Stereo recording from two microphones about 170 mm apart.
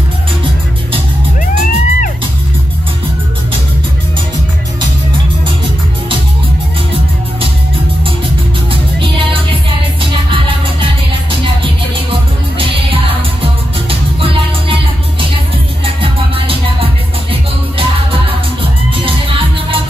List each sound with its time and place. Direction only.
1.4 s music: 50° left (ahead or behind)
9.0 s music: 30° right (ahead or behind)
11.4 s music: 30° right (ahead or behind)
18.6 s music: 30° right (ahead or behind)